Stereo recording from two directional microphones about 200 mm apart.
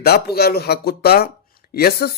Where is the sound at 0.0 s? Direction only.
50° left (ahead or behind).